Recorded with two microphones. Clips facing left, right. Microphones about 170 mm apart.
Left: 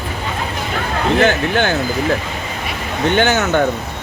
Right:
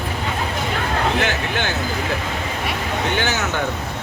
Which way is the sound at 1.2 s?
50° left (ahead or behind).